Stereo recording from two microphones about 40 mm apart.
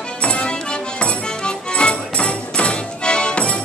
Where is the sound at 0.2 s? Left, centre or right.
Left.